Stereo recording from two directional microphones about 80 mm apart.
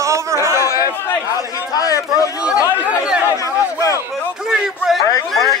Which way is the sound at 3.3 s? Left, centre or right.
Left.